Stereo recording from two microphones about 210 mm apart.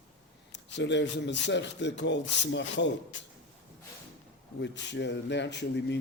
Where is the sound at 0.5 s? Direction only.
55° left (ahead or behind).